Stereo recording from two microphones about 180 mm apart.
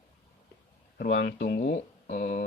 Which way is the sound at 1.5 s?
50° left (ahead or behind).